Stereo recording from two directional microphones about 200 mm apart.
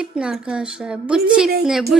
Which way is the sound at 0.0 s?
5° right (ahead or behind).